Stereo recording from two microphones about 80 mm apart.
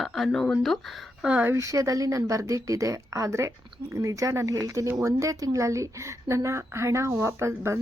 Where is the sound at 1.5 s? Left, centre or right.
Right.